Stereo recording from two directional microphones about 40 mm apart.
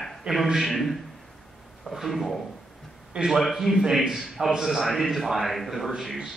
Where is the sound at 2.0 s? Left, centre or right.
Centre.